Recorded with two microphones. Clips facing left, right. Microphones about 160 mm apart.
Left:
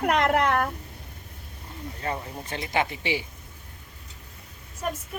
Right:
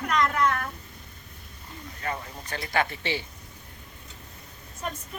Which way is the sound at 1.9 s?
25° left (ahead or behind).